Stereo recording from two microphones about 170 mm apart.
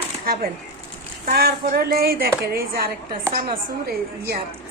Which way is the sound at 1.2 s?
65° right (ahead or behind).